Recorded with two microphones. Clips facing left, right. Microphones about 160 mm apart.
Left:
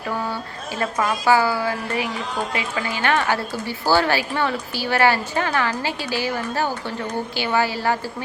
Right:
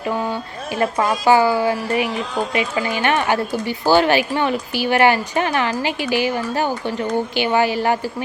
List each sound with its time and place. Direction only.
0.9 s a woman's voice: 25° right (ahead or behind)